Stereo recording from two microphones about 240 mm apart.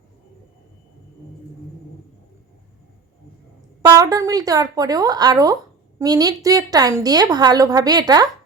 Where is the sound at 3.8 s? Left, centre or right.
Centre.